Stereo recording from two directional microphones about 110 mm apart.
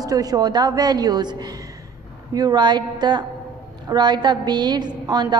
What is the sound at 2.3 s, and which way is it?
A woman's voice, 40° right (ahead or behind).